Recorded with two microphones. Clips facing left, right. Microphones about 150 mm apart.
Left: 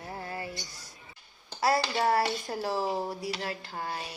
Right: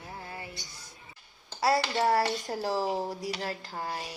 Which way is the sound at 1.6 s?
35° right (ahead or behind).